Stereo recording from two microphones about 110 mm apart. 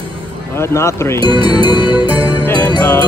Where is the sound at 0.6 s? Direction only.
25° left (ahead or behind).